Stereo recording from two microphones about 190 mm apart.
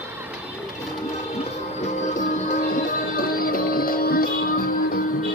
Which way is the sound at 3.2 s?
50° left (ahead or behind).